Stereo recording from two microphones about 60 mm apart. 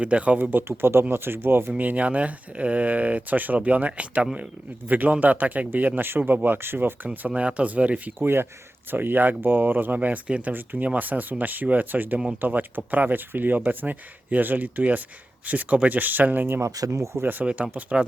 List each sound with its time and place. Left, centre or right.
0.0 s speech: right
1.8 s speech: right
16.9 s speech: right
17.4 s speech: right